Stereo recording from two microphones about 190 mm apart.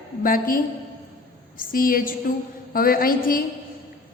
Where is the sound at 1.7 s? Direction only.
50° left (ahead or behind).